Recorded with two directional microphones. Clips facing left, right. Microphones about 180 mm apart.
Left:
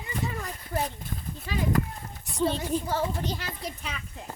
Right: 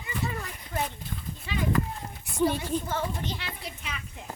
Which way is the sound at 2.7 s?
40° left (ahead or behind).